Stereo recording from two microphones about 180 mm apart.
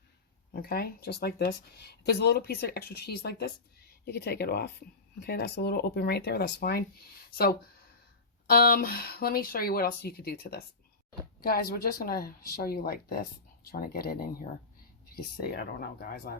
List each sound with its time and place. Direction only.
0.5 s speech: 55° left (ahead or behind)
8.4 s speech: 55° left (ahead or behind)